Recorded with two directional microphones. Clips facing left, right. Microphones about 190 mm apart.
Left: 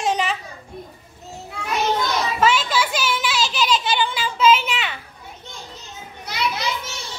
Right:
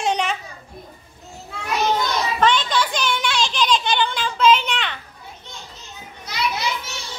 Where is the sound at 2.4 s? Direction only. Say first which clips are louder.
Even; 5° left (ahead or behind).